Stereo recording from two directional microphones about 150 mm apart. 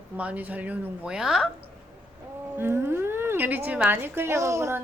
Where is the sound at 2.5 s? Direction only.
15° right (ahead or behind).